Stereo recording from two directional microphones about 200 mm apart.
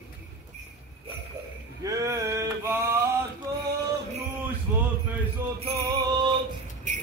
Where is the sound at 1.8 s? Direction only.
15° right (ahead or behind).